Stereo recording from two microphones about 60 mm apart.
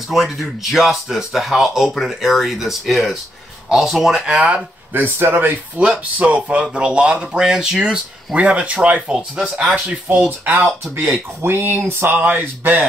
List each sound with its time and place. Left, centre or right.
0.1 s speech: centre
4.9 s speech: right
9.1 s speech: centre
10.1 s speech: right
11.0 s speech: right